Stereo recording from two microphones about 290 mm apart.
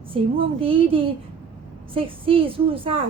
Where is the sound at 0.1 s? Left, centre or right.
Centre.